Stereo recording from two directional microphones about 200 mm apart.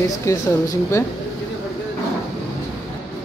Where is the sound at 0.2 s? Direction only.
15° left (ahead or behind).